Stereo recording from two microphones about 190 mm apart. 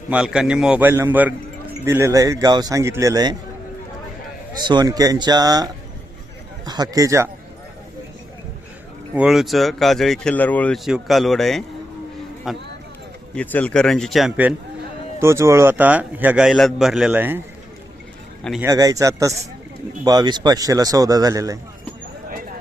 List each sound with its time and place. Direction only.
0.1 s a man's voice: 5° right (ahead or behind)
4.6 s a man's voice: 20° right (ahead or behind)
9.1 s a man's voice: centre (ahead or behind)
18.6 s a man's voice: 20° right (ahead or behind)